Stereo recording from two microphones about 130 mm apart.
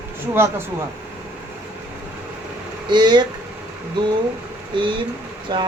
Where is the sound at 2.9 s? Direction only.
35° right (ahead or behind).